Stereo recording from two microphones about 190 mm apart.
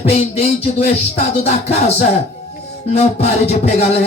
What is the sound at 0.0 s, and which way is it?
Speech, 35° left (ahead or behind).